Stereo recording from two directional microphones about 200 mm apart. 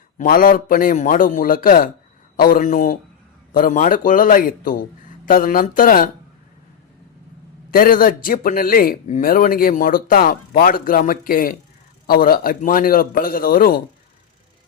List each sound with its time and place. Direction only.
0.2 s speech: 45° left (ahead or behind)
7.7 s speech: 45° left (ahead or behind)